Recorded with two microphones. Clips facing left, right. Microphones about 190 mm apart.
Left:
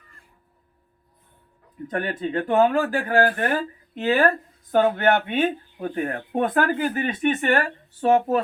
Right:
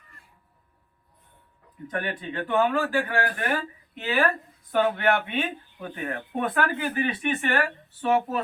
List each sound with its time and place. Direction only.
1.9 s speech: 40° left (ahead or behind)